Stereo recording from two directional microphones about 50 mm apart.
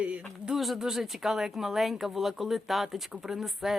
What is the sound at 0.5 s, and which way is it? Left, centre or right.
Speech, centre.